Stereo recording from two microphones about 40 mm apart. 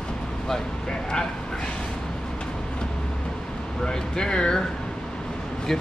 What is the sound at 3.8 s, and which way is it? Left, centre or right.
Speech, centre.